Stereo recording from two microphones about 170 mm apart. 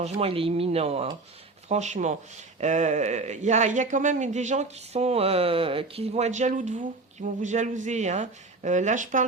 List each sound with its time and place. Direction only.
0.0 s speech: 35° right (ahead or behind)